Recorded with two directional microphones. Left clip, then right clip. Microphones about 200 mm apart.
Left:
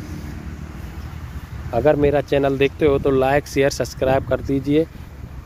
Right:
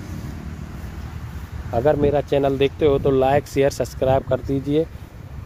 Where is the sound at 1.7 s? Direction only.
5° left (ahead or behind).